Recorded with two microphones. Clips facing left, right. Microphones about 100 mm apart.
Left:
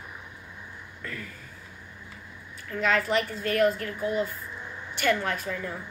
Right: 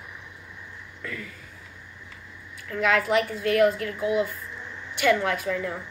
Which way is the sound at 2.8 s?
5° right (ahead or behind).